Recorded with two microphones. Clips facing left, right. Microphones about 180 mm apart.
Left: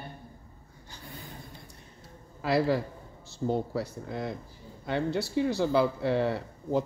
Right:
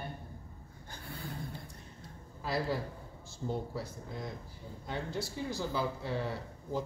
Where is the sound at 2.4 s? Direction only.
75° left (ahead or behind).